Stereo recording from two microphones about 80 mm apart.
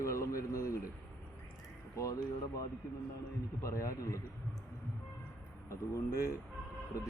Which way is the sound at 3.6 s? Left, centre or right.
Left.